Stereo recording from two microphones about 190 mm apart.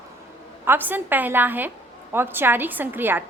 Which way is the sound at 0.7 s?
10° right (ahead or behind).